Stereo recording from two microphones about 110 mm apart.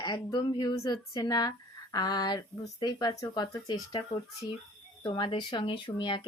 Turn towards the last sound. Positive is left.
turn(degrees=45)  # may be behind; listen again after turning